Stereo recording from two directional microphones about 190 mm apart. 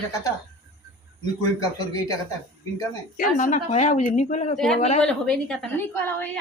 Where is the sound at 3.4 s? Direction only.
40° left (ahead or behind).